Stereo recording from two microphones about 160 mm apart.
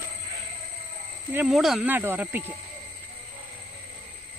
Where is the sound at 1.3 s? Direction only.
5° right (ahead or behind).